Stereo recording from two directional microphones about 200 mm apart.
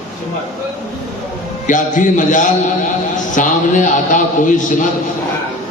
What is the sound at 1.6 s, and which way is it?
A man's voice, 40° left (ahead or behind).